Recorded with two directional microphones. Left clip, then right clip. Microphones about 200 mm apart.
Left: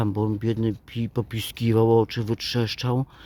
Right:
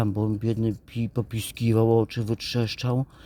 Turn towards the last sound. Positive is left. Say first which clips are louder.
# left 2 dB
turn(degrees=20)  # may be behind; listen again after turning